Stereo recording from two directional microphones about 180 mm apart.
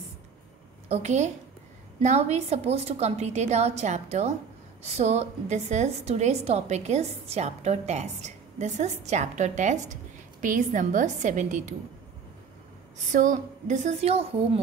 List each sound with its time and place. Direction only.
0.8 s a woman's voice: 40° right (ahead or behind)
13.1 s a woman's voice: 45° right (ahead or behind)